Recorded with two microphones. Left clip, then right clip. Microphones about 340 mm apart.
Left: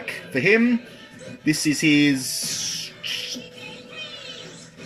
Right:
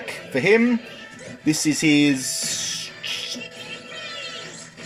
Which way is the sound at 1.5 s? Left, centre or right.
Right.